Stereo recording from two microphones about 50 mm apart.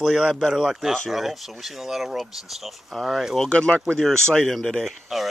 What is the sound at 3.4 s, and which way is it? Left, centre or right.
Speech, centre.